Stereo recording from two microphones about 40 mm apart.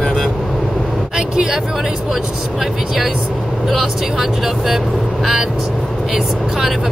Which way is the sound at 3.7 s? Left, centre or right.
Centre.